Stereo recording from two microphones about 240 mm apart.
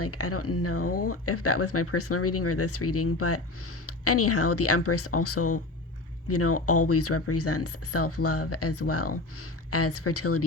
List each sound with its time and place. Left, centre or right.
0.0 s speech: left